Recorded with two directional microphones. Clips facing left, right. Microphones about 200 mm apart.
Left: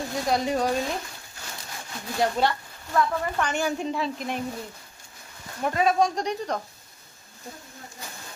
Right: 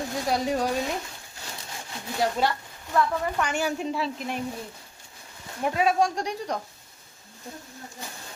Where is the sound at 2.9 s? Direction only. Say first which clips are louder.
Even; 10° right (ahead or behind).